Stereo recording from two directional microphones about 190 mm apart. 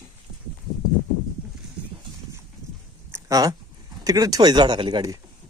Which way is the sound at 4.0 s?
20° right (ahead or behind).